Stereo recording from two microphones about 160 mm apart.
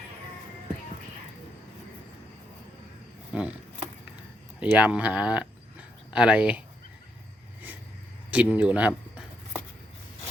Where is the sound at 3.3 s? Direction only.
5° right (ahead or behind).